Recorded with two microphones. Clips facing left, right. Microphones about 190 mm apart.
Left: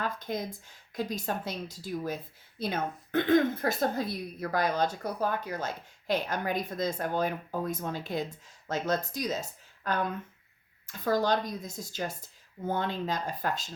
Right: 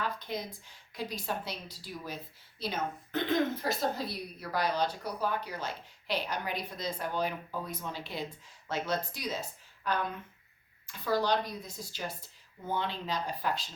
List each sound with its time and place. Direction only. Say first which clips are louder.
0.0 s a woman's voice: left 3 dB; 45° left (ahead or behind)